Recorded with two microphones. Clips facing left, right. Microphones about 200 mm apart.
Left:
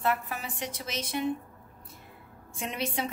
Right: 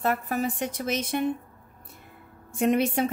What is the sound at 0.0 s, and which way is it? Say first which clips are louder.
Speech: right 5 dB; 40° right (ahead or behind).